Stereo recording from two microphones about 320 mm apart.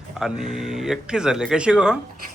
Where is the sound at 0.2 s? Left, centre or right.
Centre.